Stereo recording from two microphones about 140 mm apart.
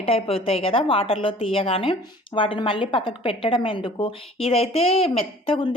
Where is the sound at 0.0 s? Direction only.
45° left (ahead or behind).